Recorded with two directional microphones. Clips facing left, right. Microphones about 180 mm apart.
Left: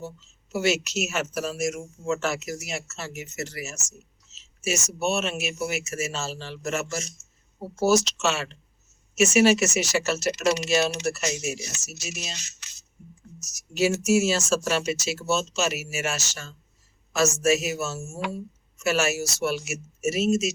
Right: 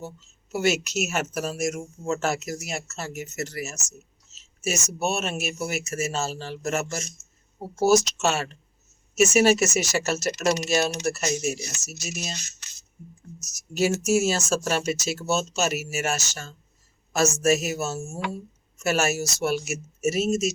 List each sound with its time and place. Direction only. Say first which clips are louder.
0.5 s speech: right 1 dB; 50° right (ahead or behind)